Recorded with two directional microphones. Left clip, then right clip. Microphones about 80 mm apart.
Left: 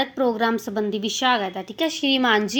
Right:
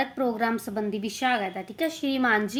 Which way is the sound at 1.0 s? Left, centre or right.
Left.